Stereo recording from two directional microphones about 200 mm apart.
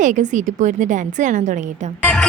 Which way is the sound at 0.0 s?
40° right (ahead or behind).